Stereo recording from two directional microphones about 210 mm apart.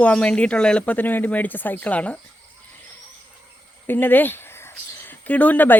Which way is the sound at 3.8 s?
10° left (ahead or behind).